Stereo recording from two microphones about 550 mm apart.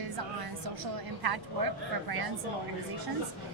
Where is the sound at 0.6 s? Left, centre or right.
Right.